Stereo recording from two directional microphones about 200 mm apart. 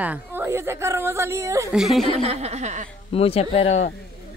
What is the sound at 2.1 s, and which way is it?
Speech, 30° right (ahead or behind).